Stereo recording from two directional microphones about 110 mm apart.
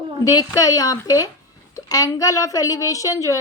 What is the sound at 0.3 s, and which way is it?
A woman's voice, 35° left (ahead or behind).